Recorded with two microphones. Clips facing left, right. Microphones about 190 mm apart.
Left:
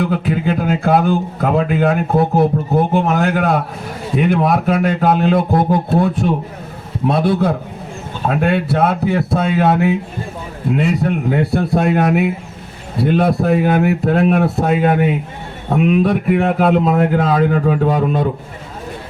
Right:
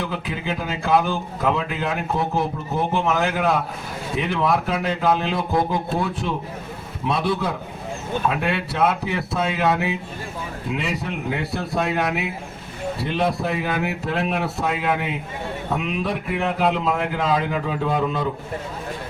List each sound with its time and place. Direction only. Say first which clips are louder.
0.0 s speech: left 10 dB; 50° left (ahead or behind)